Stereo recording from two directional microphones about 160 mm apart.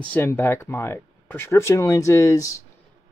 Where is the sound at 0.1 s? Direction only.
15° left (ahead or behind).